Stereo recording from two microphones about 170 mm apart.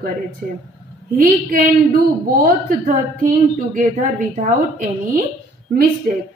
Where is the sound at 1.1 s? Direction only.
55° right (ahead or behind).